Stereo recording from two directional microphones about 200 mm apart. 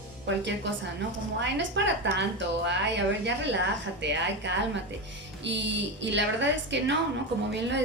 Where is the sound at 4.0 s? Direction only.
60° right (ahead or behind).